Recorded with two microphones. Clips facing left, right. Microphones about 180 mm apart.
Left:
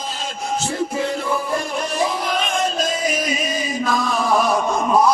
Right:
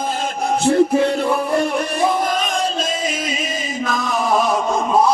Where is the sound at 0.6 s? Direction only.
60° right (ahead or behind).